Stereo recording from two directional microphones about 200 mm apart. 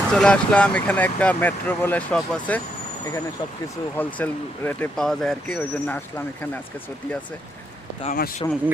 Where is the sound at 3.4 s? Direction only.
25° left (ahead or behind).